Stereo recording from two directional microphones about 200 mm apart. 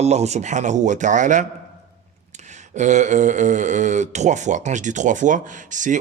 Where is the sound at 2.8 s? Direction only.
35° right (ahead or behind).